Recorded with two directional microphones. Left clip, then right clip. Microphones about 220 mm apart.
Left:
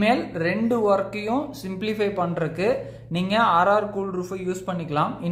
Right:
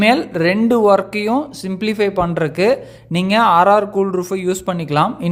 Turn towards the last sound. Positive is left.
turn(degrees=-40)  # may be behind; listen again after turning